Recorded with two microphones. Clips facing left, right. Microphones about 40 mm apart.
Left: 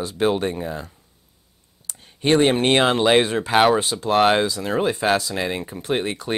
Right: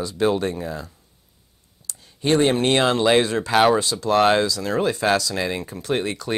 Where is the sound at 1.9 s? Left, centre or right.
Left.